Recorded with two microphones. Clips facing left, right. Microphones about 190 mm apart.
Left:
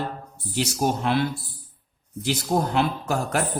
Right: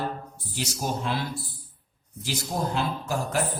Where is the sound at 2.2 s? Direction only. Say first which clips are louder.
Left 6 dB; 60° left (ahead or behind).